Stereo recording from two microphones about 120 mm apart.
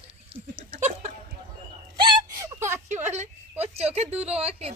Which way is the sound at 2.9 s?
80° right.